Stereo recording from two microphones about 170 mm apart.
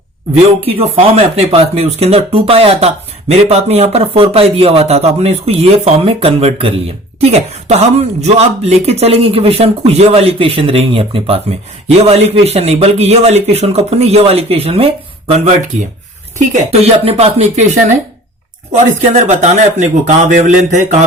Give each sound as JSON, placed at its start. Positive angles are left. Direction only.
{"t": 0.6, "sound": "speech", "side_deg": -35}
{"t": 16.4, "sound": "speech", "side_deg": -40}
{"t": 19.1, "sound": "a man's voice", "side_deg": -45}